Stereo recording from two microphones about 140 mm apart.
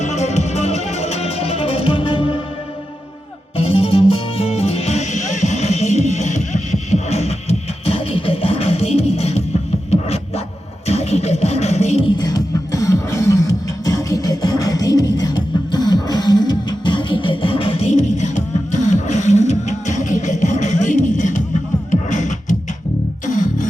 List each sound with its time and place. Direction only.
0.0 s music: 55° left (ahead or behind); by 2.4 s 40° left (ahead or behind)
3.6 s music: 45° left (ahead or behind)
9.9 s scratch: 50° left (ahead or behind)
10.8 s music: 50° left (ahead or behind)
12.0 s music: 30° left (ahead or behind); by 23.6 s 60° left (ahead or behind)